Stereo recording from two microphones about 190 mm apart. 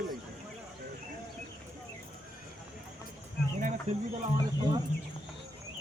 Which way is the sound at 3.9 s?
35° right (ahead or behind).